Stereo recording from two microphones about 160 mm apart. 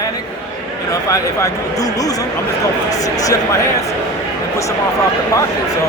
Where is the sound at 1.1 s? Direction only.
20° left (ahead or behind).